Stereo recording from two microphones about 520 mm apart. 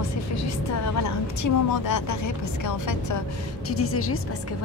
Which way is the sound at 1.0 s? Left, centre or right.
Left.